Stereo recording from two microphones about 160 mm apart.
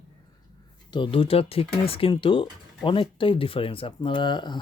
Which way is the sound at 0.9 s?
30° left (ahead or behind).